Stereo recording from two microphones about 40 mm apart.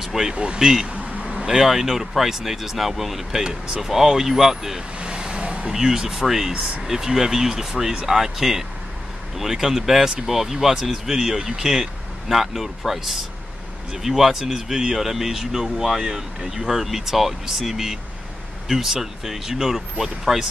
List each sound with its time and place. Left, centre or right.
0.0 s speech: centre
0.9 s vehicle: right
1.4 s speech: centre
4.9 s vehicle: right
5.7 s speech: centre
6.5 s speech: right